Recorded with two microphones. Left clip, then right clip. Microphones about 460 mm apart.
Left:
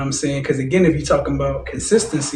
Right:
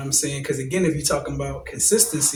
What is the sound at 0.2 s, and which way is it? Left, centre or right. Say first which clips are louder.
Speech: left 5 dB; right.